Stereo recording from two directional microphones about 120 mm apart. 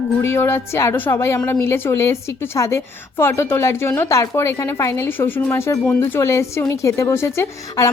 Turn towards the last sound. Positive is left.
turn(degrees=25)  # may be behind; listen again after turning